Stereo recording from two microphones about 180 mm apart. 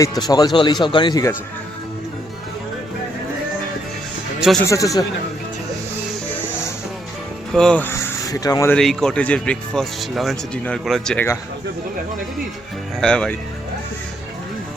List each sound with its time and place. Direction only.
0.0 s speech: 20° left (ahead or behind)
4.4 s speech: centre (ahead or behind)
4.6 s speech: 15° left (ahead or behind)
7.5 s speech: 5° left (ahead or behind); by 8.7 s 20° left (ahead or behind)
8.7 s speech: 5° left (ahead or behind)
13.0 s speech: 5° left (ahead or behind)